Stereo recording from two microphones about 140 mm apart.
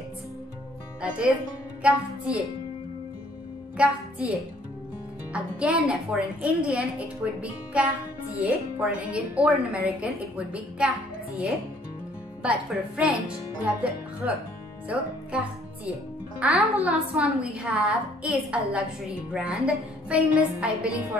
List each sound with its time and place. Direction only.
1.0 s speech: 10° right (ahead or behind)
3.7 s a woman's voice: 10° right (ahead or behind)
5.3 s a woman's voice: 5° right (ahead or behind)
12.4 s a woman's voice: 10° right (ahead or behind)
15.3 s a woman's voice: 10° right (ahead or behind)